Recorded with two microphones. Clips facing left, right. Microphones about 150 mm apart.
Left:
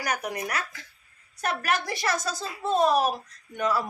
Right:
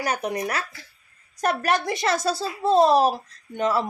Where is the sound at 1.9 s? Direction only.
25° right (ahead or behind).